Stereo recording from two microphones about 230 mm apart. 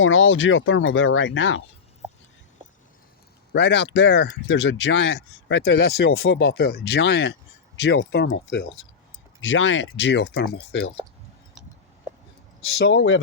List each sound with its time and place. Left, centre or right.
0.0 s speech: left
3.5 s speech: left
12.8 s speech: left